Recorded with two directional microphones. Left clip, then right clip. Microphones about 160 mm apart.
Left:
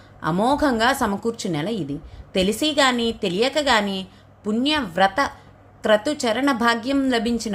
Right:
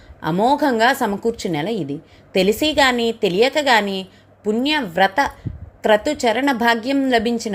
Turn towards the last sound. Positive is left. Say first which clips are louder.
# right 4 dB
turn(degrees=-10)  # may be behind; listen again after turning